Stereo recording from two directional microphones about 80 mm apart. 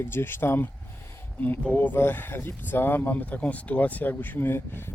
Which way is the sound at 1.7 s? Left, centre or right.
Left.